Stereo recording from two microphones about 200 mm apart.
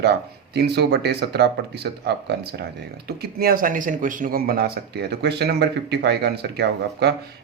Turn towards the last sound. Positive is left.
turn(degrees=-55)  # may be behind; listen again after turning